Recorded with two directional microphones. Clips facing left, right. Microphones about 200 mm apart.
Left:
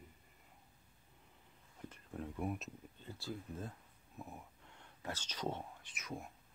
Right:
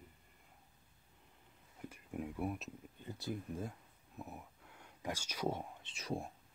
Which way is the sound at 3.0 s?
20° right (ahead or behind).